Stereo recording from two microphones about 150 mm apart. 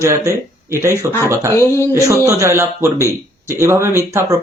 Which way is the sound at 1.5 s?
20° left (ahead or behind).